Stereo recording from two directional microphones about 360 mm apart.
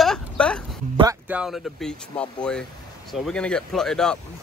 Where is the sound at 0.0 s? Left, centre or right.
Centre.